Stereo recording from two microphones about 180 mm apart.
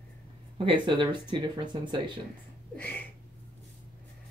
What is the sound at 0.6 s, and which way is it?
Speech, 25° right (ahead or behind).